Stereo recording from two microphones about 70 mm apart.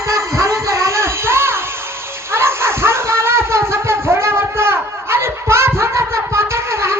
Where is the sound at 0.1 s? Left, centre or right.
Right.